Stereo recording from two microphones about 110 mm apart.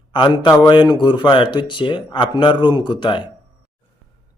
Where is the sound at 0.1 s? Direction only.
45° left (ahead or behind).